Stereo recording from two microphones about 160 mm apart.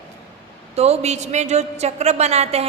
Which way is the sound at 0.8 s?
40° right (ahead or behind).